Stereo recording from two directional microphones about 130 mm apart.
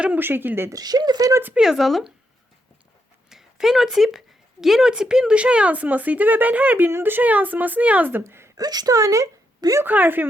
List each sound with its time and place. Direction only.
0.0 s speech: 15° right (ahead or behind)
0.8 s speech: 30° right (ahead or behind)
1.4 s speech: 15° right (ahead or behind)
1.6 s speech: centre (ahead or behind)
3.2 s a sound: 5° right (ahead or behind)
4.6 s speech: 5° right (ahead or behind); by 9.8 s 25° right (ahead or behind)
9.8 s speech: 15° right (ahead or behind)